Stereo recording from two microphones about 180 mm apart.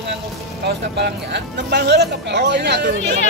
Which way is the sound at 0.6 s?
65° right (ahead or behind).